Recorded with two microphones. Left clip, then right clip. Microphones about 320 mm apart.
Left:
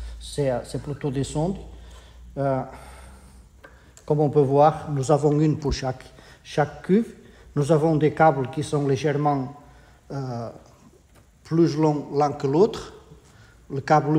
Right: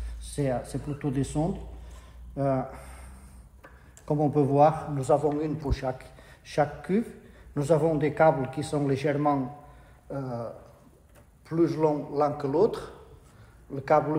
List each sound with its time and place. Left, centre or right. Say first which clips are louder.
0.2 s a man's voice: left 5 dB; left
4.0 s a man's voice: left 5 dB; left